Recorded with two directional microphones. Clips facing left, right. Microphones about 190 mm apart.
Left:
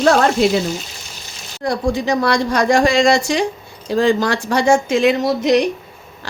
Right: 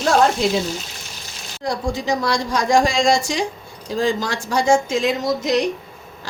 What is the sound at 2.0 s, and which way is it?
Speech, 65° left (ahead or behind).